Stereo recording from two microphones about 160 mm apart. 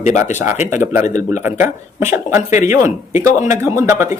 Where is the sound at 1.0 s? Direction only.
50° left (ahead or behind).